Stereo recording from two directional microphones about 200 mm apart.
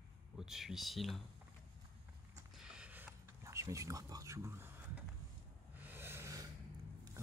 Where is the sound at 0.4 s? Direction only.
Centre (ahead or behind).